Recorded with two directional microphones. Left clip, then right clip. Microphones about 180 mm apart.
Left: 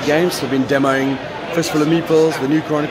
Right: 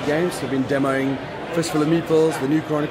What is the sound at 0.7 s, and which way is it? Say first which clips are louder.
Speech: left 5 dB; 10° left (ahead or behind).